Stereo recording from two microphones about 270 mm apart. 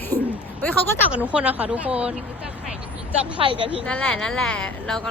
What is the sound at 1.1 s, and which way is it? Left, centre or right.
A woman's voice, centre.